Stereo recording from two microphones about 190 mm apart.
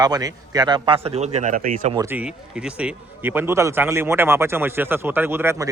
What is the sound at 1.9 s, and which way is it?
Speech, 15° right (ahead or behind).